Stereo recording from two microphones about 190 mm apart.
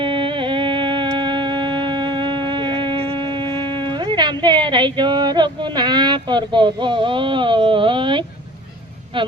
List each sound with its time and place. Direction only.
0.0 s music: 25° right (ahead or behind)